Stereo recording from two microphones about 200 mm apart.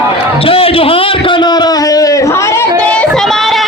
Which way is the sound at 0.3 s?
30° left (ahead or behind).